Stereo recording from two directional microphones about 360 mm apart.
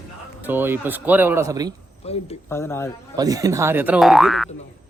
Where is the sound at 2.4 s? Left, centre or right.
Centre.